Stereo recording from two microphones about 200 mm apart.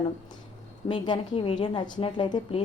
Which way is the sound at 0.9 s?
25° left (ahead or behind).